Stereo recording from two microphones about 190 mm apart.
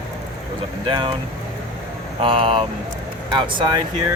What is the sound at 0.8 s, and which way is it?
Speech, 25° right (ahead or behind).